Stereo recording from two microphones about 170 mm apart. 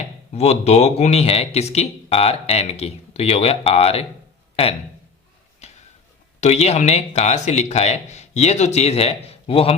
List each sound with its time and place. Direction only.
0.3 s a man's voice: 40° left (ahead or behind)
5.6 s a sound: 40° left (ahead or behind)
6.4 s a man's voice: 40° left (ahead or behind)